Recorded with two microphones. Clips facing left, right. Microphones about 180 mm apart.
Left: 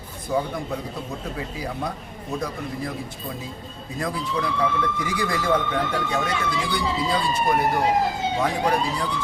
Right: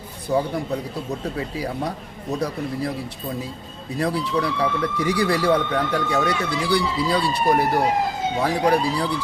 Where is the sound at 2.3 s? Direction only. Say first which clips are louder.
Right 3 dB; 35° right (ahead or behind).